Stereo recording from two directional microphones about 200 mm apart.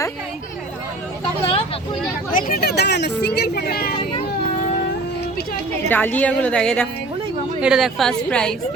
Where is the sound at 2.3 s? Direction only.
45° left (ahead or behind).